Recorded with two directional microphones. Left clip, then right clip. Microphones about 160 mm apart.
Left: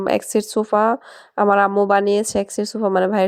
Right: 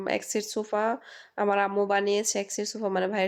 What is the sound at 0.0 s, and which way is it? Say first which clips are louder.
Speech: left 10 dB; 45° left (ahead or behind).